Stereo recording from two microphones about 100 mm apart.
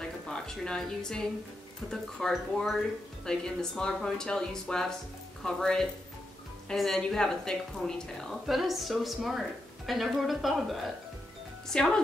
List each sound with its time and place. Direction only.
0.3 s a woman's voice: 5° left (ahead or behind)